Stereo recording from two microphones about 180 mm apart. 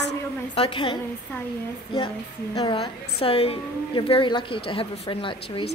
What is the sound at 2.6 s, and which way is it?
A woman's voice, 30° left (ahead or behind).